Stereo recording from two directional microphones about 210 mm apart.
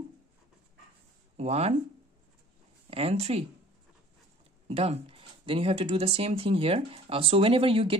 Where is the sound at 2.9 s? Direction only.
30° right (ahead or behind).